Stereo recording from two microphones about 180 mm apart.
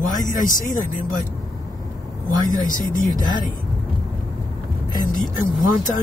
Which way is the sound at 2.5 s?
45° left (ahead or behind).